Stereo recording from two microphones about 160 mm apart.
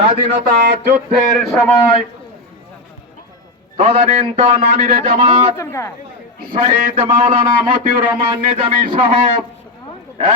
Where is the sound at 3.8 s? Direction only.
35° right (ahead or behind).